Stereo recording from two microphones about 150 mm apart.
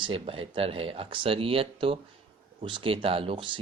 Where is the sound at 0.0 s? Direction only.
40° right (ahead or behind).